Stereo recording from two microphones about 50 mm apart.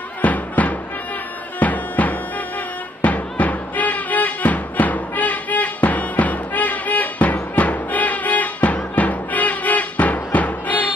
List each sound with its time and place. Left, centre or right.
0.2 s music: left
1.6 s bagpipes: left
3.0 s music: left